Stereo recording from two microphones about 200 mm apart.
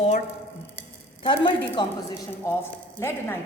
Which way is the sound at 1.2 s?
25° left (ahead or behind).